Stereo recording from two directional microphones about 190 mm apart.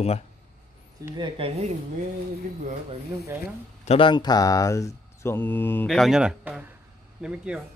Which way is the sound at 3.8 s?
30° left (ahead or behind).